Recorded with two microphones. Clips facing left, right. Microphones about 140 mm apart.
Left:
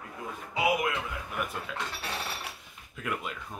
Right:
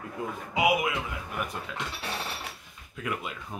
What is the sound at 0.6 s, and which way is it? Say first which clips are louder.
Speech: right 2 dB; 10° right (ahead or behind).